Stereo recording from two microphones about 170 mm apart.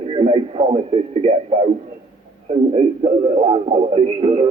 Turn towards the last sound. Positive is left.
turn(degrees=-30)  # may be behind; listen again after turning